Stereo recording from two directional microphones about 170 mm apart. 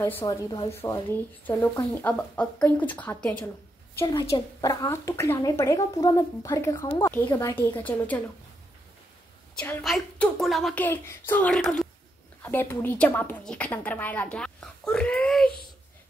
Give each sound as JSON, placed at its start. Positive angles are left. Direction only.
{"t": 0.0, "sound": "speech", "side_deg": 15}
{"t": 0.7, "sound": "a woman's voice", "side_deg": 15}
{"t": 4.1, "sound": "a woman's voice", "side_deg": 25}
{"t": 9.6, "sound": "a woman's voice", "side_deg": 10}